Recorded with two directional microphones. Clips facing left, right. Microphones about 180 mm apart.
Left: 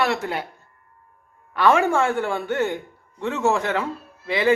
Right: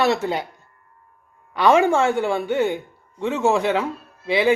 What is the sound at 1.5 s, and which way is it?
Speech, 20° right (ahead or behind).